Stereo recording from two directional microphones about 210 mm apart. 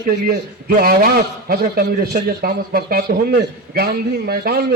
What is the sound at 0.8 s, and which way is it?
A man's voice, 45° right (ahead or behind).